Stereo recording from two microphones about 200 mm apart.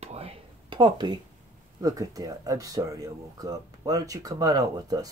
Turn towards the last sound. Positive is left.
turn(degrees=-20)  # may be behind; listen again after turning